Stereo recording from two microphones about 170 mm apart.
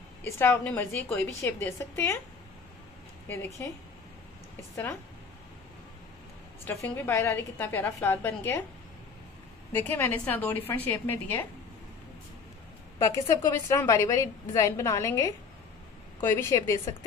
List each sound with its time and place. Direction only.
0.4 s a woman's voice: 10° left (ahead or behind)
3.3 s a woman's voice: 15° left (ahead or behind)
6.6 s a woman's voice: 15° left (ahead or behind)
9.8 s a woman's voice: 10° left (ahead or behind)
13.0 s a woman's voice: 20° left (ahead or behind)